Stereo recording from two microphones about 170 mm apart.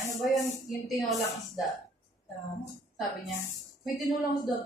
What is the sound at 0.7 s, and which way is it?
Speech, centre (ahead or behind).